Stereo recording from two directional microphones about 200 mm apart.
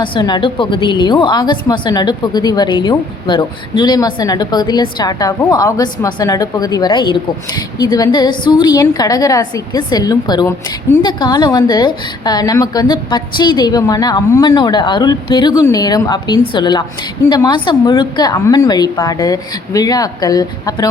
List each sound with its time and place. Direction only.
0.0 s a woman's voice: 25° left (ahead or behind)